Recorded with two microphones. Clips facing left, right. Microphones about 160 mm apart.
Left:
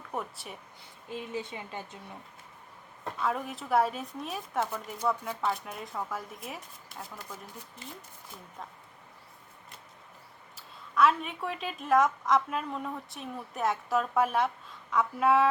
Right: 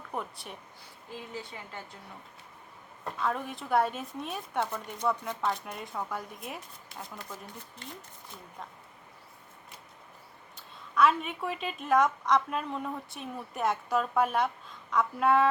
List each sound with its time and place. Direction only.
0.1 s a woman's voice: centre (ahead or behind)
1.1 s speech: 20° left (ahead or behind)
3.2 s a woman's voice: centre (ahead or behind)
10.5 s a woman's voice: centre (ahead or behind)